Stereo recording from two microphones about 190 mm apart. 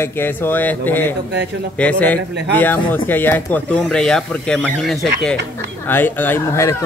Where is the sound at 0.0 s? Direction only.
10° left (ahead or behind).